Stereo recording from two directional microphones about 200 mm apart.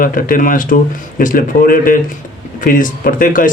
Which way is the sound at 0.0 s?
45° left (ahead or behind).